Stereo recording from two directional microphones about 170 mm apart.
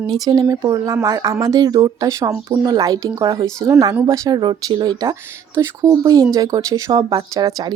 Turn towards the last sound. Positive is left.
turn(degrees=-20)  # may be behind; listen again after turning